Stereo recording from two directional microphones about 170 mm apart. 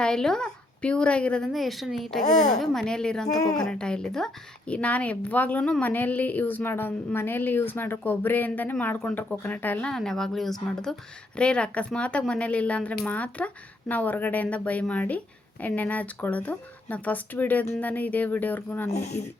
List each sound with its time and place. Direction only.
0.0 s a woman's voice: 5° left (ahead or behind)
2.2 s speech: 45° left (ahead or behind)
2.6 s a woman's voice: 5° left (ahead or behind)